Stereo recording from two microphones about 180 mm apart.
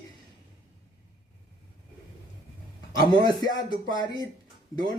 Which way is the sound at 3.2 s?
25° left (ahead or behind).